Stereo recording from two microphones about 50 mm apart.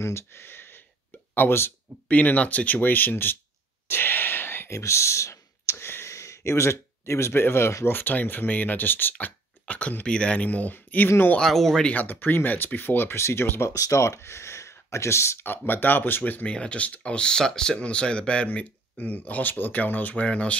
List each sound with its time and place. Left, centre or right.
0.0 s a sound: left
1.3 s speech: left
2.0 s speech: left
3.8 s a sound: left
4.6 s clicking: left
6.1 s speech: left
9.1 s speech: left
11.1 s speech: left
11.3 s speech: centre
11.8 s speech: left
13.6 s speech: left
15.4 s speech: left
16.4 s speech: left